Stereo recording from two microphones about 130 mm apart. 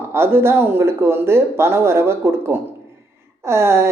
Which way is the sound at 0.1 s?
20° right (ahead or behind).